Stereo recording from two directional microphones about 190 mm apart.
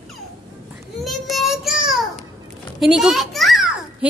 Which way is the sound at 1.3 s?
Centre (ahead or behind).